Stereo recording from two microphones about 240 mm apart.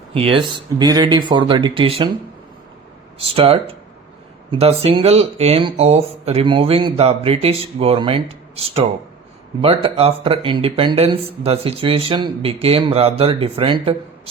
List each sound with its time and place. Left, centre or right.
0.1 s speech: right
3.2 s speech: right